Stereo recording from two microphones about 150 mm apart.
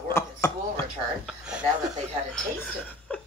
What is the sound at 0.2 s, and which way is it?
Chopping, 15° left (ahead or behind).